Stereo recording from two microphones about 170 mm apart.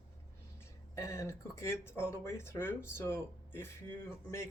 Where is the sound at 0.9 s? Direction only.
15° left (ahead or behind).